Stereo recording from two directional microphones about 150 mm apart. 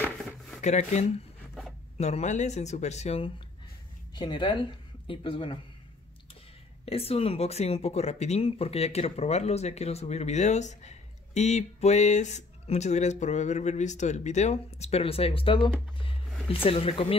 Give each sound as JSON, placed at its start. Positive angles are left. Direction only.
{"t": 0.6, "sound": "speech", "side_deg": 50}
{"t": 4.1, "sound": "speech", "side_deg": 30}
{"t": 6.9, "sound": "speech", "side_deg": 40}